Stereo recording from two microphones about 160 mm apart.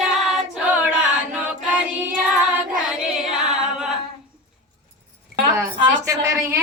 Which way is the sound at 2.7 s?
5° right (ahead or behind).